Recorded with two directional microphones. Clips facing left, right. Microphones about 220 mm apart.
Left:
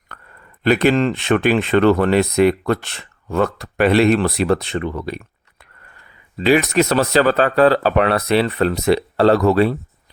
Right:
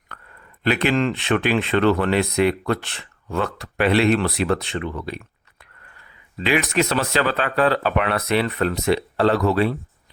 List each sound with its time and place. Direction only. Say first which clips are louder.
0.6 s speech: left 5 dB; 45° left (ahead or behind)